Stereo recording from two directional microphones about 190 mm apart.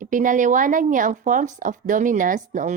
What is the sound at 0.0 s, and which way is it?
Speech, 45° right (ahead or behind).